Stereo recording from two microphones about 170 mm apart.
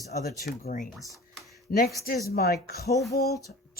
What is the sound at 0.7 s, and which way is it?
Speech, 50° left (ahead or behind).